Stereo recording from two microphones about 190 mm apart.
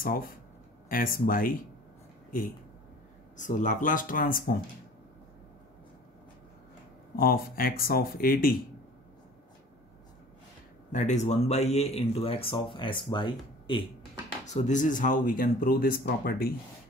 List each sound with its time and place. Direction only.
0.0 s speech: 50° left (ahead or behind)
3.3 s speech: 40° left (ahead or behind)
7.2 s speech: 50° left (ahead or behind)
10.9 s speech: 40° left (ahead or behind)
14.4 s speech: 40° left (ahead or behind)